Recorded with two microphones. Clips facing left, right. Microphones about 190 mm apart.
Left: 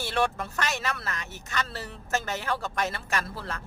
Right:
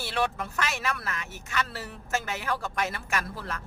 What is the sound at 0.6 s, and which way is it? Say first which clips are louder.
A woman's voice: even; 40° left (ahead or behind).